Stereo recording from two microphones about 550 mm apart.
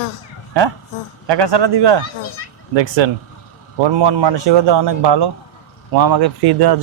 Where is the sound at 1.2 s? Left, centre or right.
Right.